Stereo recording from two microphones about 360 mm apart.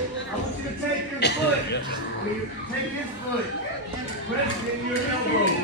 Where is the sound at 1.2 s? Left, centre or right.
Left.